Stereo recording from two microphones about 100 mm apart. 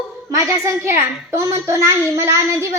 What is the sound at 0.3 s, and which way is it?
A child's voice, 35° right (ahead or behind).